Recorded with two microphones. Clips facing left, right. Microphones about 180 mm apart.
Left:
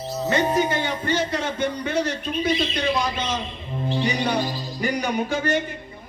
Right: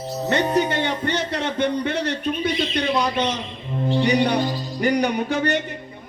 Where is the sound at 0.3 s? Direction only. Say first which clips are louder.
Right 1 dB; 65° right (ahead or behind).